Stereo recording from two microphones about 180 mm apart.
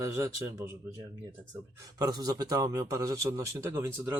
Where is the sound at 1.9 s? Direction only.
20° right (ahead or behind).